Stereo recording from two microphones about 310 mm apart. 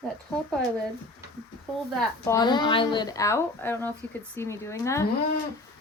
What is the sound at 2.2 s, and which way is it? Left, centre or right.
A woman's voice, centre.